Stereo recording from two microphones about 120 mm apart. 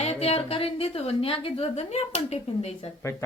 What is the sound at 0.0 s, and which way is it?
A woman's voice, 60° left (ahead or behind).